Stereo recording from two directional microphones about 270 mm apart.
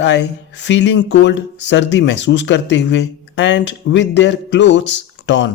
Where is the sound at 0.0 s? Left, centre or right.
Left.